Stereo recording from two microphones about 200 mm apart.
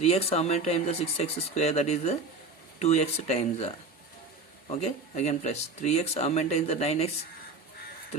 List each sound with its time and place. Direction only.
0.0 s speech: 30° left (ahead or behind)
4.7 s speech: 35° left (ahead or behind)